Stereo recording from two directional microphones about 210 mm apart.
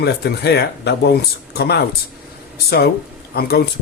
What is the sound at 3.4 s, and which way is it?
Speech, 50° left (ahead or behind).